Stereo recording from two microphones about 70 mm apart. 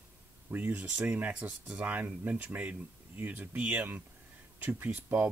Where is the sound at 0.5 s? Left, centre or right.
Right.